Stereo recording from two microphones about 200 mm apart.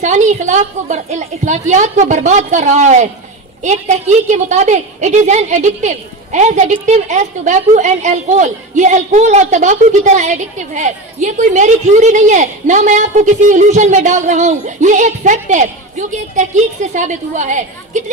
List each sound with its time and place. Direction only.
0.0 s a woman's voice: 35° right (ahead or behind)